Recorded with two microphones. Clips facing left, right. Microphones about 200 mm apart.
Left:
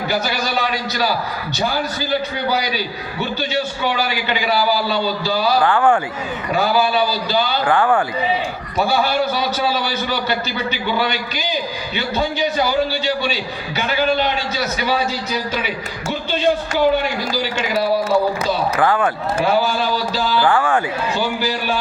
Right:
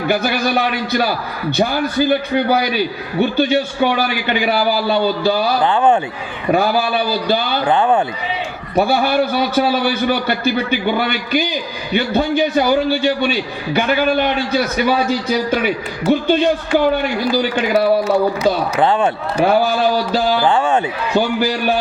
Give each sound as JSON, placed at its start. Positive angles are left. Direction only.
{"t": 0.1, "sound": "a man's voice", "side_deg": -55}
{"t": 5.6, "sound": "speech", "side_deg": -20}
{"t": 6.5, "sound": "a man's voice", "side_deg": -55}
{"t": 7.6, "sound": "speech", "side_deg": -20}
{"t": 8.7, "sound": "a man's voice", "side_deg": -55}
{"t": 16.2, "sound": "a sound", "side_deg": -55}
{"t": 18.1, "sound": "a man's voice", "side_deg": -55}
{"t": 18.5, "sound": "a sound", "side_deg": -55}
{"t": 18.8, "sound": "speech", "side_deg": -25}
{"t": 19.5, "sound": "a sound", "side_deg": -55}
{"t": 20.4, "sound": "speech", "side_deg": -25}
{"t": 21.2, "sound": "a sound", "side_deg": -55}